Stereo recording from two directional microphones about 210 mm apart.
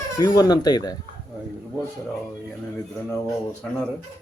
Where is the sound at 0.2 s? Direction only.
20° left (ahead or behind).